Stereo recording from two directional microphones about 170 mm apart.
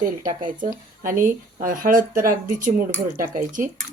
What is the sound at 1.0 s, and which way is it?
Speech, 50° right (ahead or behind).